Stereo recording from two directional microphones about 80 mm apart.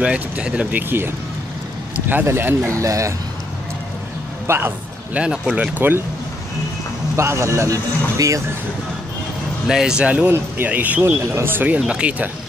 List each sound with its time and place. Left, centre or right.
0.0 s speech: centre
2.8 s speech: right
4.5 s speech: right
5.1 s speech: centre
5.8 s speech: right
7.2 s speech: right
9.7 s speech: centre